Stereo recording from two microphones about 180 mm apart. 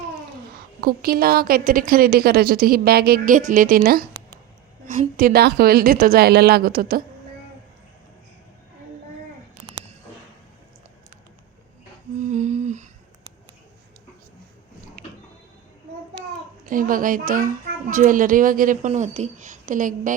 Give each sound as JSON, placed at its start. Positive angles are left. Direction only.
{"t": 0.5, "sound": "a woman's voice", "side_deg": -55}
{"t": 12.2, "sound": "humming", "side_deg": -40}
{"t": 16.6, "sound": "a woman's voice", "side_deg": -50}